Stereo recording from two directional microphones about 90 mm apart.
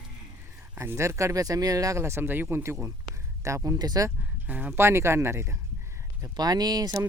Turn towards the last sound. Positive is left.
turn(degrees=-45)  # may be behind; listen again after turning